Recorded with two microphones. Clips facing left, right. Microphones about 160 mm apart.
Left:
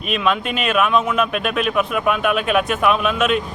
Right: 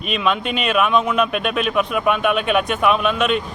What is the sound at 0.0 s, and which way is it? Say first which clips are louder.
Speech: left 1 dB; centre (ahead or behind).